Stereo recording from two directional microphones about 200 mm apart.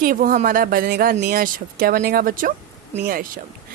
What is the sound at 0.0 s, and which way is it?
A woman's voice, 45° right (ahead or behind).